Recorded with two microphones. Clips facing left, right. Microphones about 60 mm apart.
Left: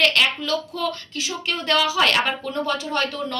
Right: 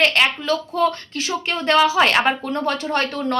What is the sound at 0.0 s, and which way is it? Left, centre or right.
A woman's voice, right.